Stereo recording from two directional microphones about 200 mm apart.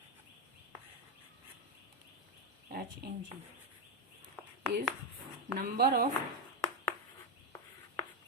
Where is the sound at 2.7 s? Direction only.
50° right (ahead or behind).